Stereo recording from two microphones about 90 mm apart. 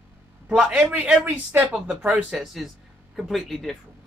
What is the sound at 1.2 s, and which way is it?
Speech, 20° right (ahead or behind).